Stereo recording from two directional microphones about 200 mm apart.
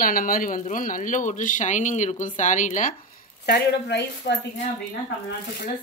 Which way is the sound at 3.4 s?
55° left (ahead or behind).